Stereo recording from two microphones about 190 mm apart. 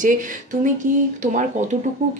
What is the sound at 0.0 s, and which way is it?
Speech, 45° right (ahead or behind).